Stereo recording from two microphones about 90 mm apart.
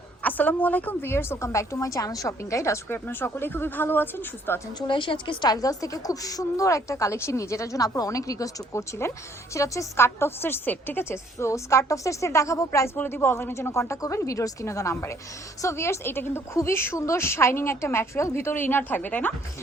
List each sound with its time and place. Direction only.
0.2 s a woman's voice: 15° left (ahead or behind); by 3.0 s 35° left (ahead or behind)
3.1 s a woman's voice: 25° left (ahead or behind)
4.9 s a woman's voice: 65° left (ahead or behind); by 11.2 s 20° left (ahead or behind)
11.3 s a woman's voice: 35° left (ahead or behind)
13.0 s a woman's voice: 25° left (ahead or behind)